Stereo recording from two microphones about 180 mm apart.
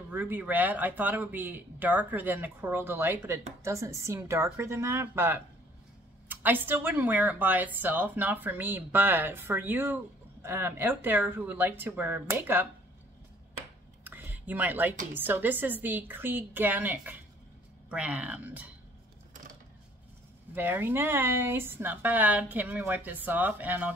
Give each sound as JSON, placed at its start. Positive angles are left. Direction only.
{"t": 0.1, "sound": "speech", "side_deg": -10}
{"t": 14.0, "sound": "a sound", "side_deg": -10}
{"t": 15.1, "sound": "speech", "side_deg": -10}
{"t": 20.5, "sound": "speech", "side_deg": -10}